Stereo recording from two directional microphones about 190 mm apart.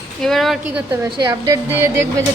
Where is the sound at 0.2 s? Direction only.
Centre (ahead or behind).